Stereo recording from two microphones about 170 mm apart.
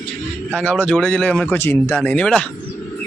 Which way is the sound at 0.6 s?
5° left (ahead or behind).